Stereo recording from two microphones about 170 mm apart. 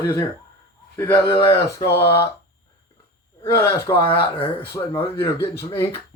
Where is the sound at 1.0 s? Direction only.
15° left (ahead or behind).